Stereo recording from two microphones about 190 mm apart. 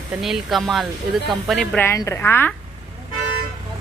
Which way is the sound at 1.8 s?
15° left (ahead or behind).